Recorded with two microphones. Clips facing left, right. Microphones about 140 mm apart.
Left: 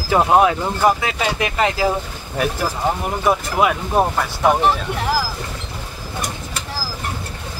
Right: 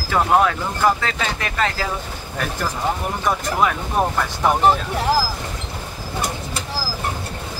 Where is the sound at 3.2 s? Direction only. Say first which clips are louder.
Left 3 dB; 10° left (ahead or behind).